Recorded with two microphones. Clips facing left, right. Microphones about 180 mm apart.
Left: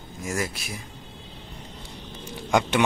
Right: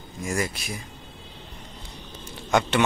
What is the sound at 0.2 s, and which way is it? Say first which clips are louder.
Speech: right 1 dB; centre (ahead or behind).